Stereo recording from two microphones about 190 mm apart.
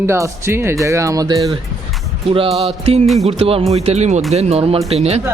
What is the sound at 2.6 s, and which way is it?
A man's voice, 30° right (ahead or behind).